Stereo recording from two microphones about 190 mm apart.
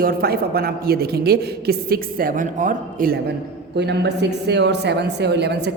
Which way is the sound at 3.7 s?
60° right (ahead or behind).